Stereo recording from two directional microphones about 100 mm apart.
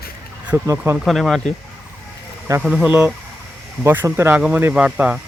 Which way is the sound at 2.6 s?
10° right (ahead or behind).